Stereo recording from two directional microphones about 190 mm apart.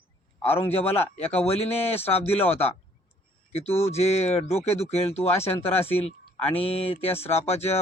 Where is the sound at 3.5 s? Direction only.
35° left (ahead or behind).